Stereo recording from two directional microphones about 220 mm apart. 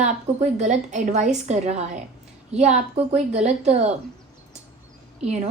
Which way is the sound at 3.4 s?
30° right (ahead or behind).